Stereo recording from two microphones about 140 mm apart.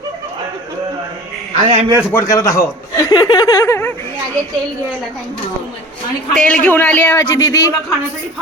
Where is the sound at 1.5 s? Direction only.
50° right (ahead or behind).